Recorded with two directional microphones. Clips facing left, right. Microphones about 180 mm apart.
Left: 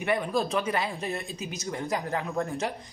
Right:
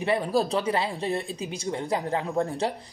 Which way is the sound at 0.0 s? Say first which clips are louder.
Right 3 dB; 30° right (ahead or behind).